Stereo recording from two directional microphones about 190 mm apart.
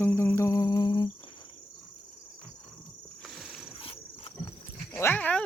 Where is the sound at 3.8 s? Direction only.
30° left (ahead or behind).